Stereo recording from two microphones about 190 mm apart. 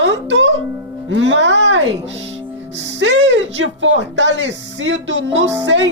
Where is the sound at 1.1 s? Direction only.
75° right (ahead or behind).